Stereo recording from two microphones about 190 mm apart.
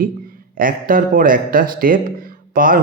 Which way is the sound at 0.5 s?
45° right (ahead or behind).